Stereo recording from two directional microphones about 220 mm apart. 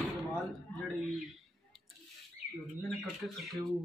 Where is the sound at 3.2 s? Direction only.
Centre (ahead or behind).